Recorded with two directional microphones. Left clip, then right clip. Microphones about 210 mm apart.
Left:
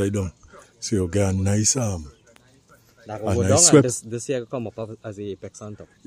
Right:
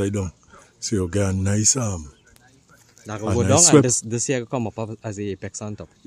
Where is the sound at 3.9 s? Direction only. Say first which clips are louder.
Right 3 dB; 45° right (ahead or behind).